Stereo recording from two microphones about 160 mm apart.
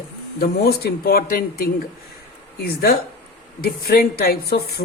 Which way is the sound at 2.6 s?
80° left.